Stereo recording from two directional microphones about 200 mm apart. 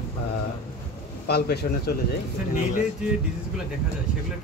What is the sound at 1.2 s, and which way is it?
Speech, 55° left (ahead or behind).